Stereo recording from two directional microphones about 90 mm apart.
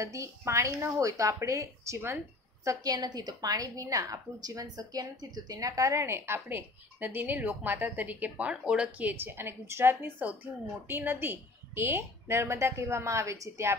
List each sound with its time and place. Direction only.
0.0 s speech: 35° right (ahead or behind)
2.6 s a woman's voice: 40° right (ahead or behind)